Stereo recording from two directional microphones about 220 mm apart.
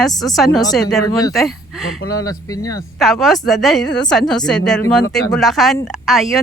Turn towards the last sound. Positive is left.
turn(degrees=0)  # may be behind; listen again after turning